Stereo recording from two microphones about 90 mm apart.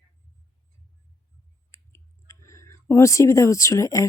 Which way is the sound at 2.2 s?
35° left (ahead or behind).